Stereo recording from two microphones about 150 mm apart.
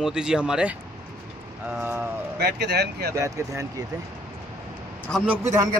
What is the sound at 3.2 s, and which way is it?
Speech, 20° right (ahead or behind).